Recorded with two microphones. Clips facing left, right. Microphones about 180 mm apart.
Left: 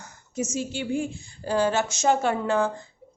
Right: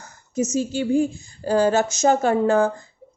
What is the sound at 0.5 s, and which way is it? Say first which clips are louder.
Speech: right 8 dB; 40° right (ahead or behind).